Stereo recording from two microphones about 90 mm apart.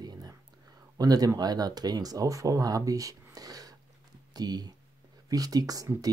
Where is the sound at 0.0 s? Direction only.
50° right (ahead or behind).